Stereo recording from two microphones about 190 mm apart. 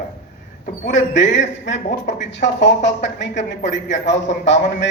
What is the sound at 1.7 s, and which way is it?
Speech, 40° left (ahead or behind).